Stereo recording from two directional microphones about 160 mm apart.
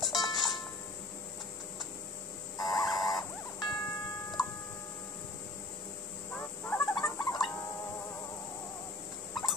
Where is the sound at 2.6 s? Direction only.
25° left (ahead or behind).